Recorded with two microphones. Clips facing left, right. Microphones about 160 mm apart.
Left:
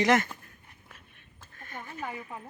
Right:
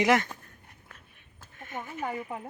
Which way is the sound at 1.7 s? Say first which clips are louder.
Right 4 dB; 20° right (ahead or behind).